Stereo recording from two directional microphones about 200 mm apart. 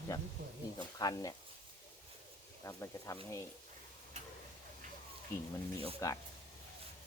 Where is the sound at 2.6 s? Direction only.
15° left (ahead or behind).